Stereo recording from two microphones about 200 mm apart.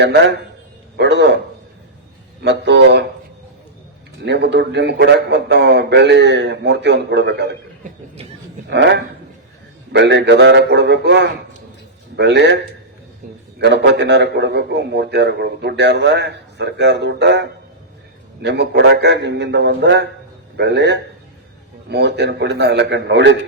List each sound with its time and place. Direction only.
0.0 s a man's voice: 60° right (ahead or behind)
2.4 s a man's voice: 60° right (ahead or behind)
4.2 s a man's voice: 60° right (ahead or behind)
8.7 s a man's voice: 60° right (ahead or behind)
13.2 s a man's voice: 45° right (ahead or behind)
13.6 s a man's voice: 60° right (ahead or behind)